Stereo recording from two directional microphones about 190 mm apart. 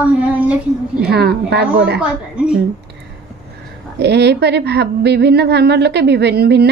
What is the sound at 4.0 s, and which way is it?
A woman's voice, 60° right (ahead or behind).